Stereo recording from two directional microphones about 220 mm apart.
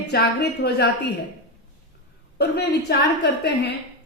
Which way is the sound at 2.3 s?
45° left (ahead or behind).